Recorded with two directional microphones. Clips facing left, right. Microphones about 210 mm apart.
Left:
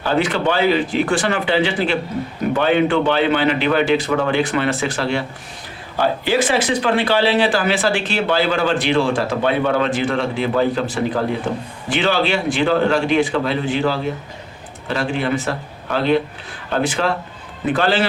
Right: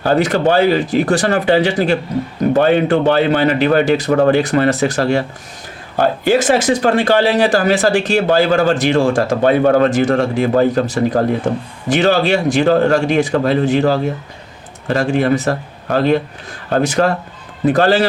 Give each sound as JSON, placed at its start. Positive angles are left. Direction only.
{"t": 0.0, "sound": "speech", "side_deg": -45}